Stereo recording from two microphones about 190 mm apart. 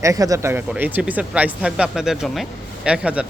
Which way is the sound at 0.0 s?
15° right (ahead or behind).